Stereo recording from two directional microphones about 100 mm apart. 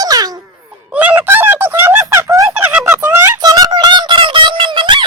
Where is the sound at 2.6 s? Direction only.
20° right (ahead or behind).